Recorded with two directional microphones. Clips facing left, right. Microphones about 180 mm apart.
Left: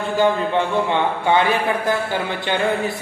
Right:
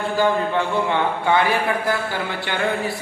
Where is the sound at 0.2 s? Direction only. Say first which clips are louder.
Left 2 dB; 20° left (ahead or behind).